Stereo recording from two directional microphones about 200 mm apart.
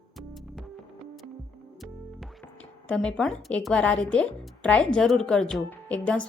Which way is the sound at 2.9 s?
5° left (ahead or behind).